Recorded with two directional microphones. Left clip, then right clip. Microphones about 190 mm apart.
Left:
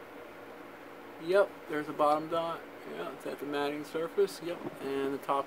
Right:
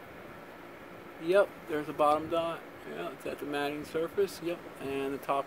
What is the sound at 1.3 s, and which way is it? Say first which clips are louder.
Speech: right 1 dB; 5° right (ahead or behind).